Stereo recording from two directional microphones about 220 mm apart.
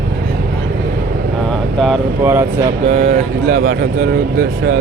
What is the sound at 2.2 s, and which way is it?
Speech, 10° right (ahead or behind).